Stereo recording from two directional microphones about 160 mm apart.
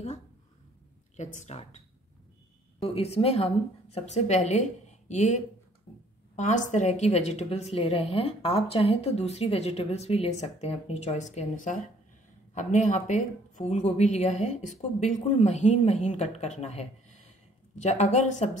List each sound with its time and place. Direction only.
1.1 s speech: 50° left (ahead or behind)
2.8 s a woman's voice: 40° left (ahead or behind)
5.9 s a sound: 40° left (ahead or behind)
6.3 s a woman's voice: 50° left (ahead or behind)